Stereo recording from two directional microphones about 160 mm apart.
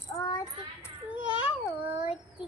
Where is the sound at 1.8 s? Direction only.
10° right (ahead or behind).